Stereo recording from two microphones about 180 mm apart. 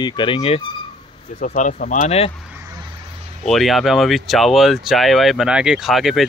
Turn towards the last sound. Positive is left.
turn(degrees=0)  # may be behind; listen again after turning